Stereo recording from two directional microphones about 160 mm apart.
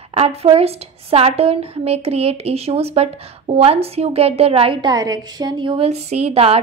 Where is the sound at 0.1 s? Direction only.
40° right (ahead or behind).